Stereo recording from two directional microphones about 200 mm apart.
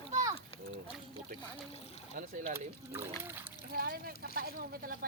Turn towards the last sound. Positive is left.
turn(degrees=-45)  # may be behind; listen again after turning